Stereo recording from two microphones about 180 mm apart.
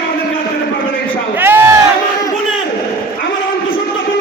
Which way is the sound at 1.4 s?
15° right (ahead or behind).